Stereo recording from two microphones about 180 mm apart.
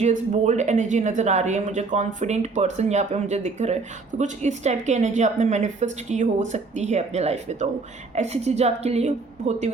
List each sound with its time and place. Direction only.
0.0 s a woman's voice: 40° right (ahead or behind)